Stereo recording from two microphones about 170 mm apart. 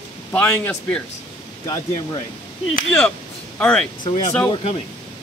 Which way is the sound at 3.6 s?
5° left (ahead or behind).